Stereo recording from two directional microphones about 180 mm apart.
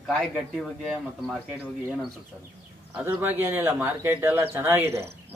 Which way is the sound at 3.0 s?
10° right (ahead or behind).